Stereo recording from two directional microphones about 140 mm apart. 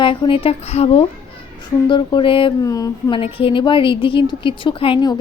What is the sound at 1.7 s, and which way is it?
Speech, 35° left (ahead or behind).